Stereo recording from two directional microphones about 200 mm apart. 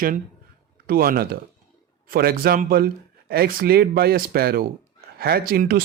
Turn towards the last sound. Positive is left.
turn(degrees=-45)  # may be behind; listen again after turning